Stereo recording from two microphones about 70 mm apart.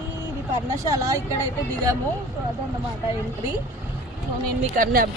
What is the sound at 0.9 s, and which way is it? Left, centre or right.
Speech, right.